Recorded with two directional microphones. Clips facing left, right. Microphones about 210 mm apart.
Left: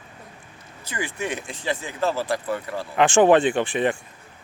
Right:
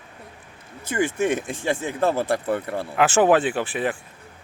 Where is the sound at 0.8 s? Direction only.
50° right (ahead or behind).